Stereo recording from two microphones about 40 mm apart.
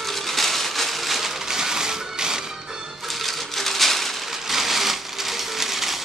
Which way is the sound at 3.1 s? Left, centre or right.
Centre.